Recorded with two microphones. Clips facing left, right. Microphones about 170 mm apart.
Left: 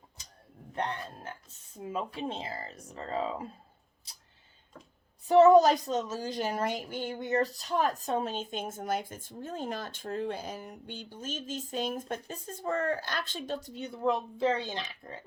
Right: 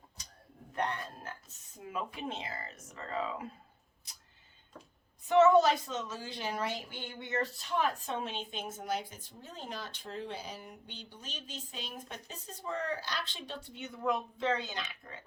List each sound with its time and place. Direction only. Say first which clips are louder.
0.8 s speech: left 1 dB; 30° left (ahead or behind)
5.3 s speech: left 4 dB; 40° left (ahead or behind)